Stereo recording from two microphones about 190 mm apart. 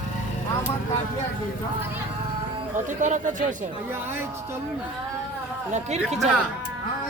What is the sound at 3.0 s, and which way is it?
Speech, 40° right (ahead or behind).